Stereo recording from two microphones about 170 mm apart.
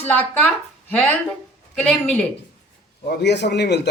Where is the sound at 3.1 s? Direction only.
80° left.